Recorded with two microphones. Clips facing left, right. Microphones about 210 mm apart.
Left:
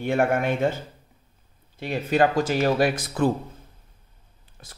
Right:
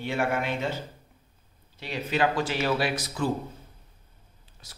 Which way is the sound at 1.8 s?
50° left (ahead or behind).